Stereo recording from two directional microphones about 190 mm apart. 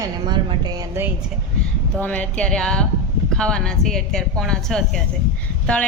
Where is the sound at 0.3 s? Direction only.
25° right (ahead or behind).